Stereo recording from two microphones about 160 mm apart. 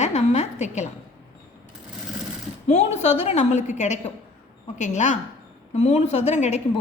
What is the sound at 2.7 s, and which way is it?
A woman's voice, 45° left (ahead or behind).